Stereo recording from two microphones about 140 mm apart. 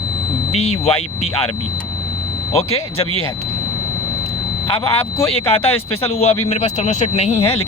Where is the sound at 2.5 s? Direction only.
45° left (ahead or behind).